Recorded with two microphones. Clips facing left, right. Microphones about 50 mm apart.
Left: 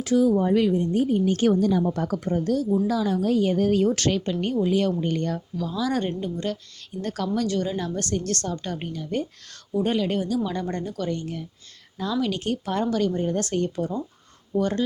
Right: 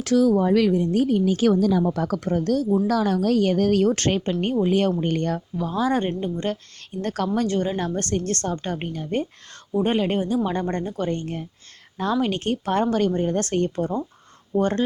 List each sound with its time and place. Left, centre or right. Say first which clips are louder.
0.0 s speech: right 2 dB; right
3.9 s a woman's voice: right 1 dB; right
5.5 s a woman's voice: right 3 dB; right
7.3 s a woman's voice: right 1 dB; right